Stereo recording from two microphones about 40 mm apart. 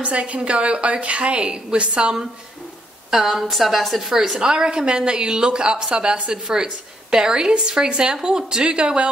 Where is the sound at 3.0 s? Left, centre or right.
Centre.